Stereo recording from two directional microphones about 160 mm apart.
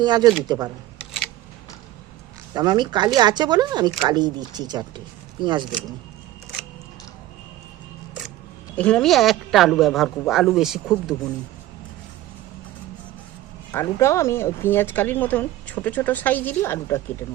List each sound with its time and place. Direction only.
0.0 s speech: 25° right (ahead or behind)
2.5 s speech: 25° right (ahead or behind)
8.7 s a woman's voice: 5° left (ahead or behind)
13.7 s speech: 15° left (ahead or behind)